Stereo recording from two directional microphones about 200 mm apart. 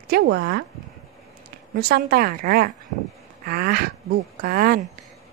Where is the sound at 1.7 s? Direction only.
50° right (ahead or behind).